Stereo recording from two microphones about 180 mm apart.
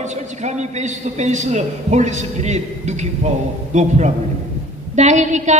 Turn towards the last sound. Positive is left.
turn(degrees=-40)  # may be behind; listen again after turning